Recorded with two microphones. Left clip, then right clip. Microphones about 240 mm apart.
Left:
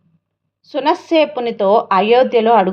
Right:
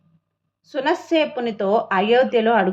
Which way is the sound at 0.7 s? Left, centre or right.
Centre.